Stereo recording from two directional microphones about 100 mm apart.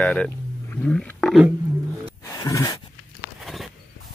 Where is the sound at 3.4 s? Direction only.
Centre (ahead or behind).